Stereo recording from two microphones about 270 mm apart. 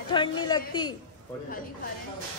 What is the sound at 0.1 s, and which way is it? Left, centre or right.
Speech, centre.